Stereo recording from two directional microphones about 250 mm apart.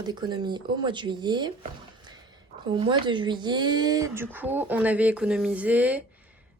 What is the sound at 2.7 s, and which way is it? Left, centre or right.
Speech, centre.